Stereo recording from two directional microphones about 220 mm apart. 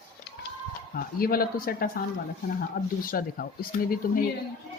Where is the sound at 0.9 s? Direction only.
40° left (ahead or behind).